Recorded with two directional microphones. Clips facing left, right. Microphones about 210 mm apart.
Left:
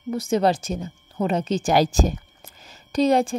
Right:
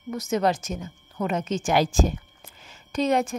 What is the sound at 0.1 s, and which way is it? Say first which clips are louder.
Speech: left 3 dB; 30° left (ahead or behind).